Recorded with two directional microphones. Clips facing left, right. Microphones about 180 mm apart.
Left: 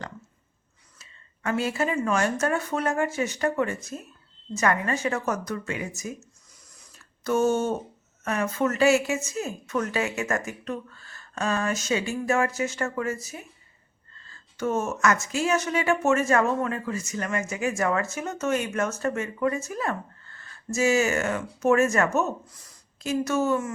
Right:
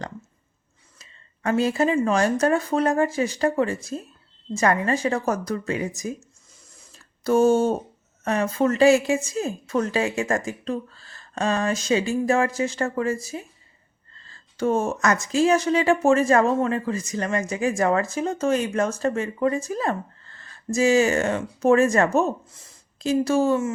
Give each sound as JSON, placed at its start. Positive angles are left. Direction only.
{"t": 0.9, "sound": "speech", "side_deg": -35}
{"t": 6.7, "sound": "a sound", "side_deg": -30}
{"t": 8.2, "sound": "speech", "side_deg": -35}
{"t": 14.3, "sound": "speech", "side_deg": -35}